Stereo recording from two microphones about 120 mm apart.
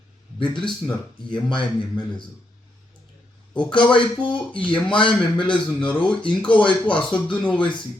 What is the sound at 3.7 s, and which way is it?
A man's voice, 40° left (ahead or behind).